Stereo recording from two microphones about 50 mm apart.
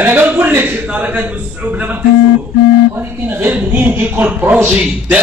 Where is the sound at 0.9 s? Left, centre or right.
Right.